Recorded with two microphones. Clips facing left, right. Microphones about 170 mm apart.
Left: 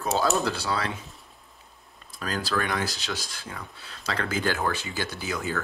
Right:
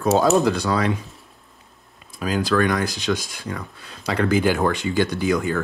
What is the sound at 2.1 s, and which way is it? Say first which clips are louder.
Speech: right 8 dB; 5° right (ahead or behind).